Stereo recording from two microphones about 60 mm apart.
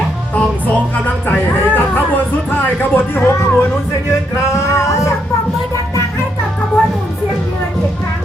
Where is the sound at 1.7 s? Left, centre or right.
Left.